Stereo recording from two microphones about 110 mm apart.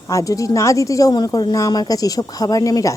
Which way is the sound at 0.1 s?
30° left (ahead or behind).